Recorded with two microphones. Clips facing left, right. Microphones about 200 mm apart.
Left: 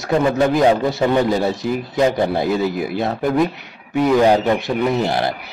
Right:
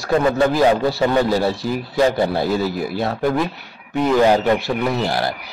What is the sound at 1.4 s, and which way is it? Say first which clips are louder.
Speech: left 1 dB; 20° left (ahead or behind).